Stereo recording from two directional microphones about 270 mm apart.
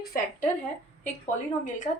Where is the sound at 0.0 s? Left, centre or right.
Left.